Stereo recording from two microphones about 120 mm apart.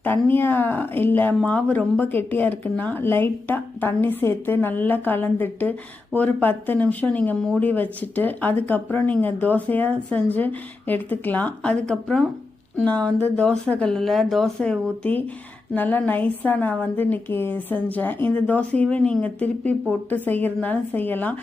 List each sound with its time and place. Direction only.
0.0 s speech: 15° left (ahead or behind)